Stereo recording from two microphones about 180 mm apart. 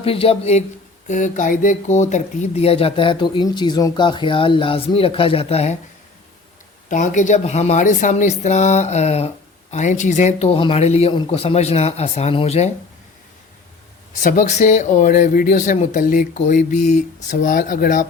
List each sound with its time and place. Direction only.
0.0 s speech: 30° left (ahead or behind)
1.0 s speech: 45° left (ahead or behind)
6.8 s speech: 45° left (ahead or behind)
14.1 s speech: 45° left (ahead or behind)